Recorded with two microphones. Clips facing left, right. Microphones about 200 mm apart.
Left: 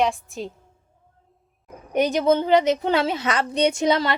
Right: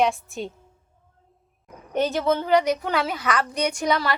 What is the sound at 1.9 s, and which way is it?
A woman's voice, 15° left (ahead or behind).